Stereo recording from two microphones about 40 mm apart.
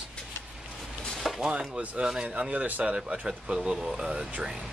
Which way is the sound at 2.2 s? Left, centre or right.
Right.